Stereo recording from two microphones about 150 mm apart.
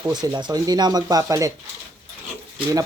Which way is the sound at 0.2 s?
30° right (ahead or behind).